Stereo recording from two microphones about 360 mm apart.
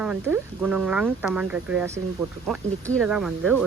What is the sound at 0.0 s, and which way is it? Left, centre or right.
Speech, centre.